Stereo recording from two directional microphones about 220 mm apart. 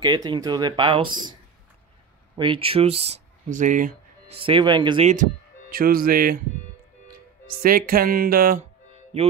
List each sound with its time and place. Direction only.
0.0 s speech: 20° right (ahead or behind)
2.3 s speech: 20° right (ahead or behind)
4.4 s speech: 25° right (ahead or behind); by 6.4 s 40° right (ahead or behind)
7.6 s speech: 40° right (ahead or behind)